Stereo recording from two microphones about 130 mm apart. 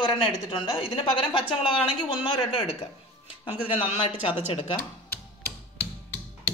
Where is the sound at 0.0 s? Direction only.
40° left (ahead or behind).